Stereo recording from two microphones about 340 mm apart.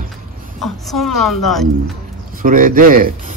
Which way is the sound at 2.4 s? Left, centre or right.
Right.